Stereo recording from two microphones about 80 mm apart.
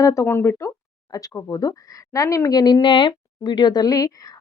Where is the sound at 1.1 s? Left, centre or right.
Left.